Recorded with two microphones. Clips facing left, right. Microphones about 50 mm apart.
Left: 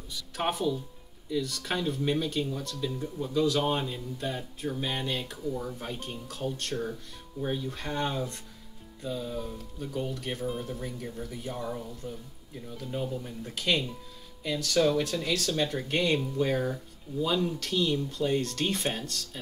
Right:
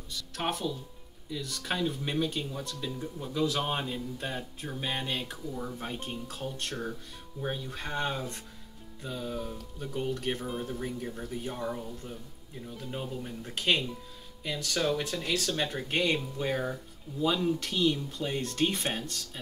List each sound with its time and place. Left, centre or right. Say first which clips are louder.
0.1 s speech: left 2 dB; centre
7.3 s speech: left 3 dB; centre
12.7 s speech: left 4 dB; centre